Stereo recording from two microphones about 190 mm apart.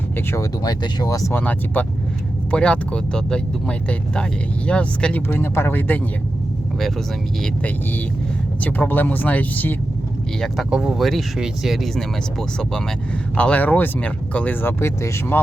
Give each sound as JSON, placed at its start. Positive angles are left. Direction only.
{"t": 0.3, "sound": "speech", "side_deg": 20}
{"t": 7.4, "sound": "speech", "side_deg": 10}
{"t": 10.4, "sound": "speech", "side_deg": 0}